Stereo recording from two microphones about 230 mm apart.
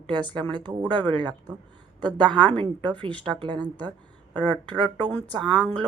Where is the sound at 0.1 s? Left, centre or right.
Centre.